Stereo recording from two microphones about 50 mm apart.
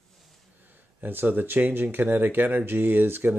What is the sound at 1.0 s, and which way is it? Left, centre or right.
Speech, right.